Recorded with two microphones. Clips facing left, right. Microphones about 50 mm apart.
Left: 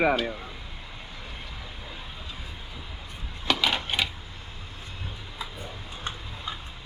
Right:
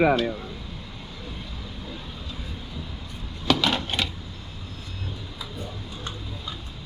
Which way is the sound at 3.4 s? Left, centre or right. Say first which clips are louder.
Right 3 dB; centre.